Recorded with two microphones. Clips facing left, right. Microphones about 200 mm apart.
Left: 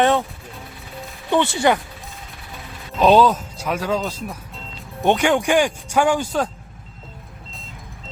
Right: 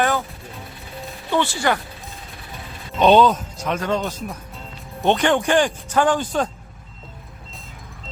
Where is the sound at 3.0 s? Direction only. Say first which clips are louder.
Even; centre (ahead or behind).